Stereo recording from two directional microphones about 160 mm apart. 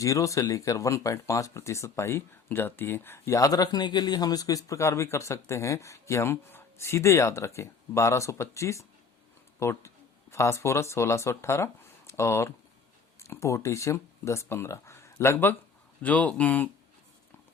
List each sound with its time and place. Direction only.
0.0 s speech: 20° left (ahead or behind)